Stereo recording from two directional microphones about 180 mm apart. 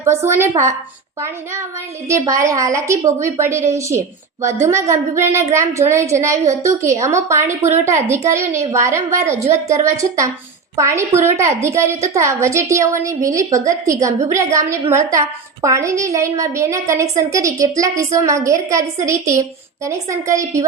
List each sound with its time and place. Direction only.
0.0 s a woman's voice: 15° right (ahead or behind)
2.0 s a woman's voice: 15° right (ahead or behind)